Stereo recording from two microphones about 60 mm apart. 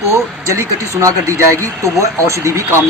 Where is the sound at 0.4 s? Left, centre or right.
Right.